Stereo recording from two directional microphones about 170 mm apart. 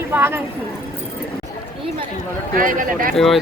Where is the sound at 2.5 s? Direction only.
50° right (ahead or behind).